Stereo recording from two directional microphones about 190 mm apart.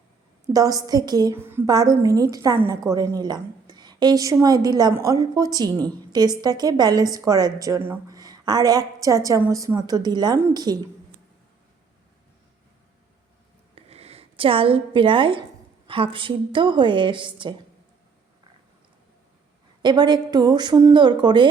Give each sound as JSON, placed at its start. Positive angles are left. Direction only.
{"t": 0.5, "sound": "a woman's voice", "side_deg": -20}
{"t": 13.7, "sound": "a sound", "side_deg": -30}
{"t": 15.9, "sound": "a woman's voice", "side_deg": -25}
{"t": 19.8, "sound": "a woman's voice", "side_deg": -25}